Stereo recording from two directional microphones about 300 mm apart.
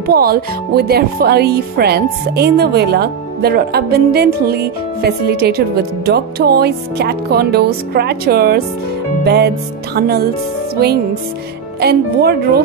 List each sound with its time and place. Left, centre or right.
0.0 s speech: right
9.2 s music: right
9.9 s speech: right
11.8 s speech: right